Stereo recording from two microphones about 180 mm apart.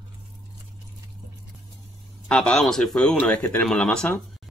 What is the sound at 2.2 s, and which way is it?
Speech, 5° left (ahead or behind).